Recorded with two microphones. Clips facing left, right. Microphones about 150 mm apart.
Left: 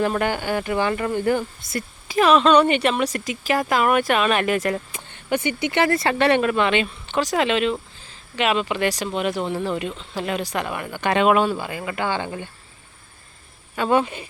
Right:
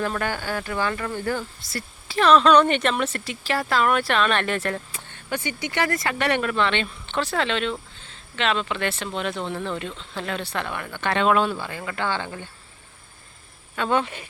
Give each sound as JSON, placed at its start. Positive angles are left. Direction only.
{"t": 0.0, "sound": "speech", "side_deg": 20}
{"t": 13.7, "sound": "speech", "side_deg": 5}